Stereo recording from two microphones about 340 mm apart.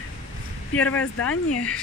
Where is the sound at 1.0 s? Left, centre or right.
Left.